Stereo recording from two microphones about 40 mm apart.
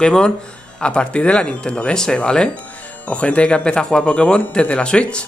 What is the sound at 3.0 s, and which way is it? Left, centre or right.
Speech, left.